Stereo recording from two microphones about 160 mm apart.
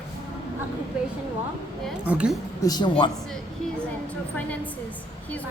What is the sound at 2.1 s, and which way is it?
Speech, 5° right (ahead or behind).